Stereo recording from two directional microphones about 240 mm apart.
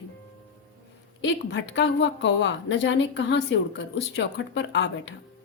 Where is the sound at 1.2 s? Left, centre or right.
Left.